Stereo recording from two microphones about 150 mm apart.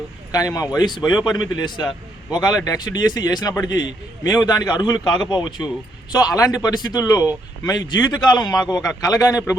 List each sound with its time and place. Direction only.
0.3 s a man's voice: 25° left (ahead or behind)